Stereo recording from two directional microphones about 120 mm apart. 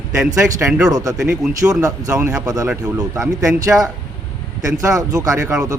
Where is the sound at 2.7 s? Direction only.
10° right (ahead or behind).